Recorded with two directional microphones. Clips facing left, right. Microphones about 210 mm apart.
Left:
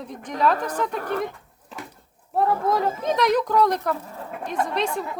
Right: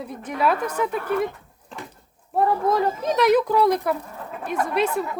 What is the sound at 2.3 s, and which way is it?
Speech, centre (ahead or behind).